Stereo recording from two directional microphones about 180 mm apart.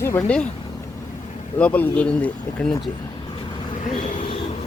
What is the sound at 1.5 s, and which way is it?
Speech, 10° left (ahead or behind).